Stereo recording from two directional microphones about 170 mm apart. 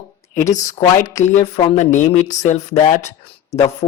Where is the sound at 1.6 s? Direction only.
35° left (ahead or behind).